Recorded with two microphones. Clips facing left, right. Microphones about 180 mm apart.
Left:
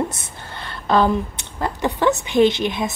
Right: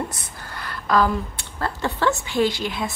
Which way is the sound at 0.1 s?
25° left (ahead or behind).